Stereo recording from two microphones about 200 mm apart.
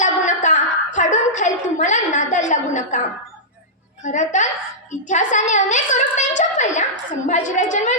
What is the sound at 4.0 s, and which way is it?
A woman's voice, 35° left (ahead or behind).